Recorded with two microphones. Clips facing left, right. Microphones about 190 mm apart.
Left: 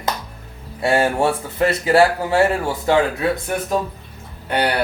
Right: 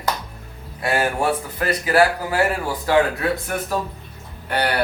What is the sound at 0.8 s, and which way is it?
Speech, 25° left (ahead or behind).